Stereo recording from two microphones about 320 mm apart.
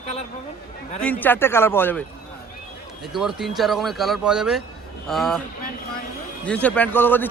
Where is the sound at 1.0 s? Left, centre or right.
Centre.